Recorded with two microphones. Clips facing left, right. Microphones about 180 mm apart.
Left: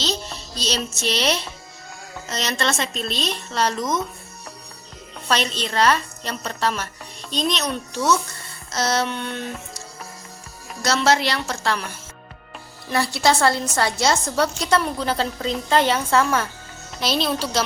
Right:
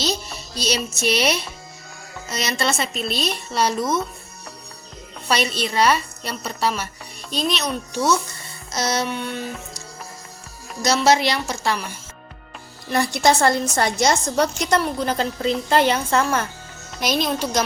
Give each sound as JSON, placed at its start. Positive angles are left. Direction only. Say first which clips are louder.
{"t": 0.0, "sound": "a woman's voice", "louder": "right 2 dB", "side_deg": -10}
{"t": 5.3, "sound": "a woman's voice", "louder": "right 1 dB", "side_deg": -10}
{"t": 10.8, "sound": "a woman's voice", "louder": "right 2 dB", "side_deg": -15}
{"t": 12.9, "sound": "a woman's voice", "louder": "right 2 dB", "side_deg": -15}